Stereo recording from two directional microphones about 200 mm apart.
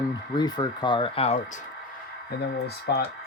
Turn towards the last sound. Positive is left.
turn(degrees=55)  # may be behind; listen again after turning